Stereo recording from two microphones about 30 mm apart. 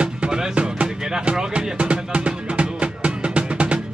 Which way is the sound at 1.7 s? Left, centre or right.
Right.